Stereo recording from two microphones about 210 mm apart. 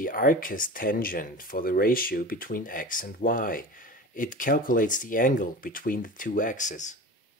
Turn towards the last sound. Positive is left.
turn(degrees=35)  # may be behind; listen again after turning